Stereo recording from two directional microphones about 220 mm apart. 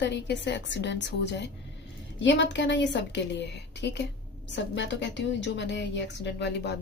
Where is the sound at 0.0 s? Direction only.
50° left (ahead or behind).